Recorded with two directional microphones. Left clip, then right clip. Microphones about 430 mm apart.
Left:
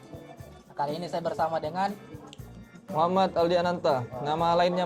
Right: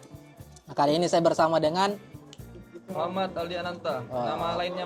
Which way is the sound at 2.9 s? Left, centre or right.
Left.